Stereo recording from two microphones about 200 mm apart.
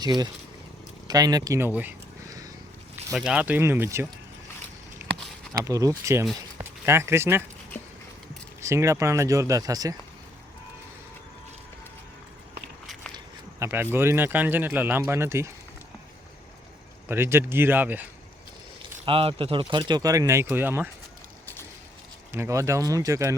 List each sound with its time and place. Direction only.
0.0 s speech: 20° right (ahead or behind)
1.0 s a sound: 20° right (ahead or behind)
3.2 s speech: 5° right (ahead or behind)
5.0 s a sound: 10° right (ahead or behind)
5.6 s speech: 15° right (ahead or behind)
8.6 s speech: 15° right (ahead or behind)
13.1 s speech: 10° right (ahead or behind)
17.1 s speech: 10° right (ahead or behind)
18.8 s speech: 25° right (ahead or behind); by 20.9 s 10° right (ahead or behind)
22.3 s speech: 15° right (ahead or behind)